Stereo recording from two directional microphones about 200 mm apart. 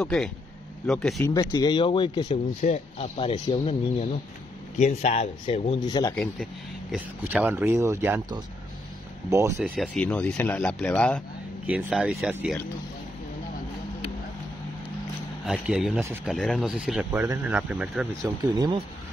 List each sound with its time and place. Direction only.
0.0 s speech: centre (ahead or behind)
1.2 s speech: 20° left (ahead or behind)
4.7 s speech: 35° left (ahead or behind)
5.9 s speech: 20° left (ahead or behind)
6.1 s speech: centre (ahead or behind)
9.6 s speech: 5° left (ahead or behind)
11.6 s speech: 5° right (ahead or behind)
15.4 s speech: 5° right (ahead or behind)
18.2 s speech: 20° right (ahead or behind)